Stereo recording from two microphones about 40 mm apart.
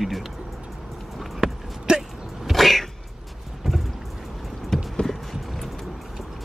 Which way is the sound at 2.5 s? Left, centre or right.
Centre.